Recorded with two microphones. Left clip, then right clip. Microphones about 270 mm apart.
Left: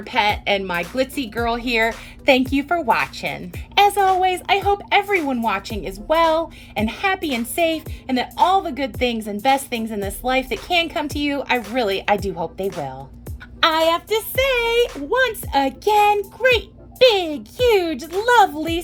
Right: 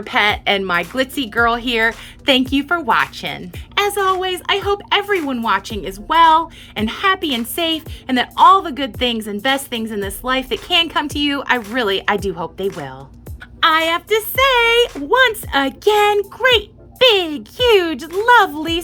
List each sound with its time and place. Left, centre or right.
0.0 s speech: centre